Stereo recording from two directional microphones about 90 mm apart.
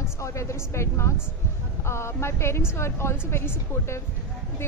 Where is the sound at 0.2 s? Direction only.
35° left (ahead or behind).